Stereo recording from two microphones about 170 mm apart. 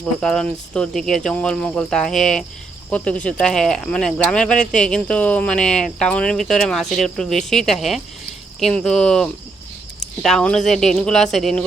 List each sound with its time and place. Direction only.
0.0 s speech: 5° left (ahead or behind)